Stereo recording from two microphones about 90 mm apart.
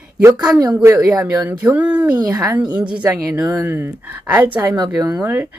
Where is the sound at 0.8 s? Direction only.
30° right (ahead or behind).